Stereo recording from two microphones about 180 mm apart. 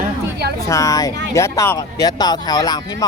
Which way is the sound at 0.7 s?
20° left (ahead or behind).